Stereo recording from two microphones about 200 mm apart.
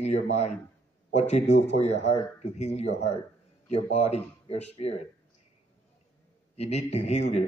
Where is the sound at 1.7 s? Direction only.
30° left (ahead or behind).